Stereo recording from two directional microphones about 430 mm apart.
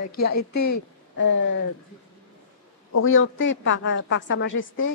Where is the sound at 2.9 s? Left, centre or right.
Left.